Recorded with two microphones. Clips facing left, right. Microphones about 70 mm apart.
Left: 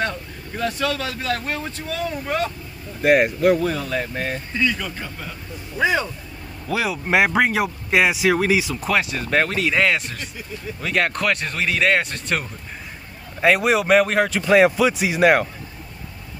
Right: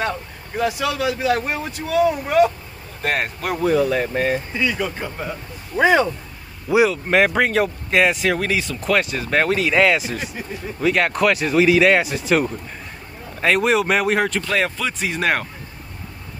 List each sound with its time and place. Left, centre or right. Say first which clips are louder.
0.6 s a man's voice: right 2 dB; centre
3.0 s speech: left 7 dB; centre
3.6 s a man's voice: right 6 dB; centre
5.8 s speech: right 5 dB; right
6.9 s speech: right 1 dB; centre
14.4 s speech: left 7 dB; centre